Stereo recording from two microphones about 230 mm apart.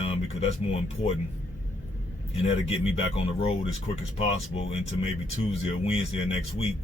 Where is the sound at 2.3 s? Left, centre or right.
Left.